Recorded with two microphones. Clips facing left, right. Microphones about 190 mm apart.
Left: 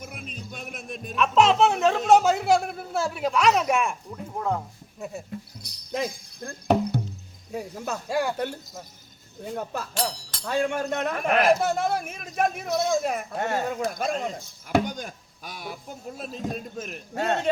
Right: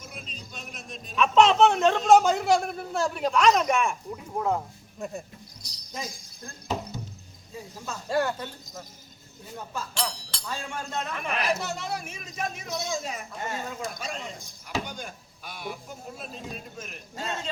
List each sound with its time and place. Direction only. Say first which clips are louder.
0.0 s music: left 4 dB; 55° left (ahead or behind)
1.1 s a man's voice: even; centre (ahead or behind)
4.4 s speech: right 1 dB; 5° right (ahead or behind)
4.9 s speech: even; 5° left (ahead or behind)
5.6 s music: left 8 dB; 60° left (ahead or behind)
7.5 s cricket: left 8 dB; 70° left (ahead or behind)
8.0 s speech: right 1 dB; 10° left (ahead or behind)
9.6 s speech: left 3 dB; 55° left (ahead or behind)
17.2 s speech: left 9 dB; 65° left (ahead or behind)